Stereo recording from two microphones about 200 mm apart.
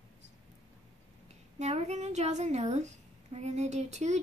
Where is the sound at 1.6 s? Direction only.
35° right (ahead or behind).